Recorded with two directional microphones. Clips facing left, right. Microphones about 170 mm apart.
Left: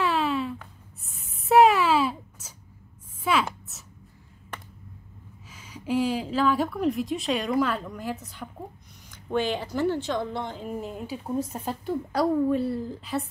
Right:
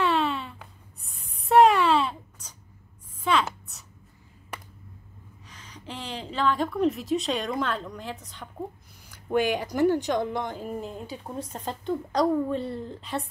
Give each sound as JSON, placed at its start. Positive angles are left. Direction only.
{"t": 0.0, "sound": "a sound", "side_deg": 0}
{"t": 5.5, "sound": "a woman's voice", "side_deg": 10}
{"t": 9.1, "sound": "speech", "side_deg": -10}
{"t": 10.6, "sound": "a woman's voice", "side_deg": 5}